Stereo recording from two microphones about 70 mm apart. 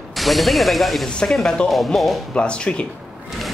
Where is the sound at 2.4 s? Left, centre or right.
Centre.